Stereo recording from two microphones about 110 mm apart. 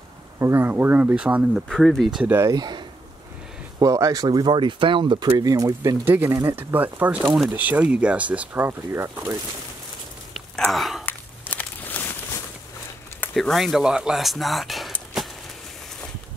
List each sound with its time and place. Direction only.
0.4 s speech: 20° right (ahead or behind)
1.7 s speech: centre (ahead or behind)
2.2 s speech: 20° right (ahead or behind)
2.5 s speech: 40° right (ahead or behind)
3.8 s speech: 30° right (ahead or behind)
10.7 s a sound: centre (ahead or behind)
11.1 s a sound: 15° left (ahead or behind)
13.3 s speech: centre (ahead or behind)